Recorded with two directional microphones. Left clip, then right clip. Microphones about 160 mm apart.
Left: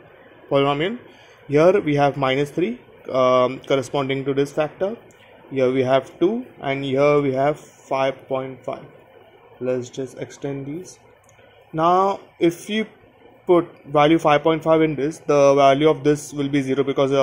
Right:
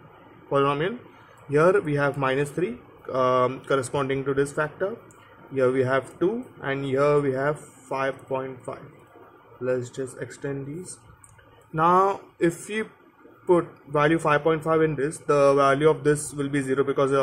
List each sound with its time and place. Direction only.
0.5 s speech: 25° left (ahead or behind)
11.7 s speech: 15° left (ahead or behind)
13.5 s speech: 25° left (ahead or behind)